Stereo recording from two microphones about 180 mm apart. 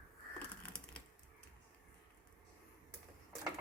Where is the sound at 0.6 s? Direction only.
5° left (ahead or behind).